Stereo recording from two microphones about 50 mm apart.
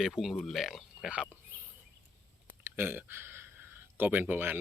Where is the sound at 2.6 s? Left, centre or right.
Right.